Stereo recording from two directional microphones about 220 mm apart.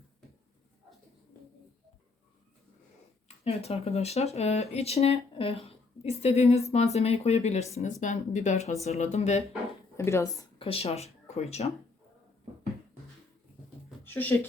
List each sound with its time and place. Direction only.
3.2 s speech: 30° left (ahead or behind)
10.0 s speech: 10° left (ahead or behind)
10.6 s speech: 25° left (ahead or behind)
14.0 s a sound: 10° left (ahead or behind)